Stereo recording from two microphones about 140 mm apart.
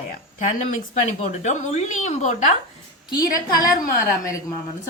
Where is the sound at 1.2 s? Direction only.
60° left (ahead or behind).